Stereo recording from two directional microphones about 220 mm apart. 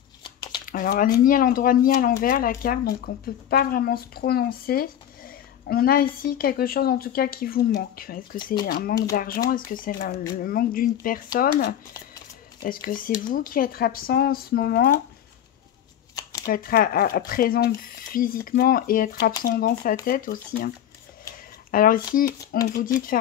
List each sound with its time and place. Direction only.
0.2 s a sound: 20° left (ahead or behind)
0.7 s a woman's voice: 40° left (ahead or behind)
16.2 s shuffling cards: 15° left (ahead or behind)
16.4 s speech: 40° left (ahead or behind)